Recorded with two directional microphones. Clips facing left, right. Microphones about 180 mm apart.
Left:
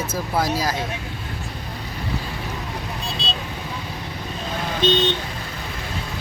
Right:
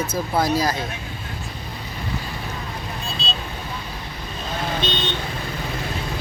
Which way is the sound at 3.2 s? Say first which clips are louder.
Even; 90° left.